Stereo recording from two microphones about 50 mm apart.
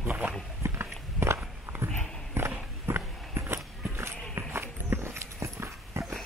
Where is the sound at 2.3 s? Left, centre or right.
Right.